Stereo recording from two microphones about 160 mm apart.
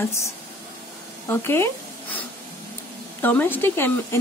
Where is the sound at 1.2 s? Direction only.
15° left (ahead or behind).